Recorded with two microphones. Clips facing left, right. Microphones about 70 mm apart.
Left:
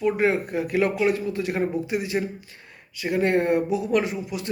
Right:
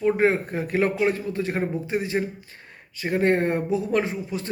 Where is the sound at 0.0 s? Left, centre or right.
Right.